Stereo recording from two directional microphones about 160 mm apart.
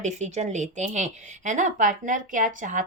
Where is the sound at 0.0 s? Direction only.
50° right (ahead or behind).